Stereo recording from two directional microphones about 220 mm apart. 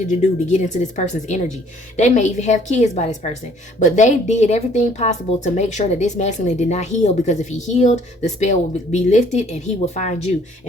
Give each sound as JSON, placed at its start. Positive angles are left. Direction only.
{"t": 0.1, "sound": "a woman's voice", "side_deg": 35}